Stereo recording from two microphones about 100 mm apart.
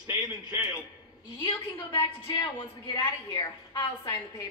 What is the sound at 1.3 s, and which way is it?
A woman's voice, 50° left (ahead or behind).